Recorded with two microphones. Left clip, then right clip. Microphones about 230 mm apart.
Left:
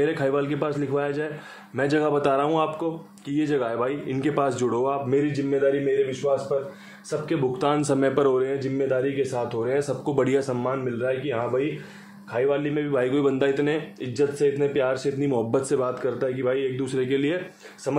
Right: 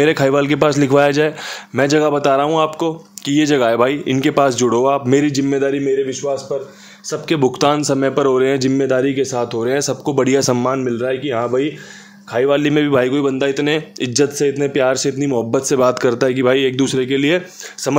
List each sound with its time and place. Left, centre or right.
0.0 s speech: right
5.1 s speech: right
8.4 s speech: right
10.1 s speech: right
10.5 s speech: right
13.0 s speech: right
15.3 s speech: right
17.9 s speech: right